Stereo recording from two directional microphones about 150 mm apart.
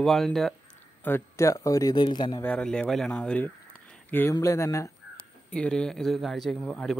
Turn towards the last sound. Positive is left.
turn(degrees=5)  # may be behind; listen again after turning